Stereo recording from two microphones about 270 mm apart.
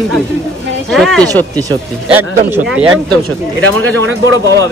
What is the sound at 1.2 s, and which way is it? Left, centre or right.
Speech, centre.